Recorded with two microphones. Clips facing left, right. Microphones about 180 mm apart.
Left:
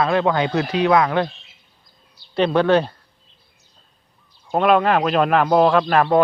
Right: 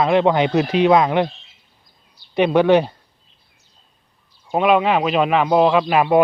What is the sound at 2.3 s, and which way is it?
Speech, 15° right (ahead or behind).